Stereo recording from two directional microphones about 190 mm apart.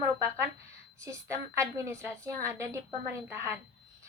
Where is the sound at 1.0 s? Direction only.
15° right (ahead or behind).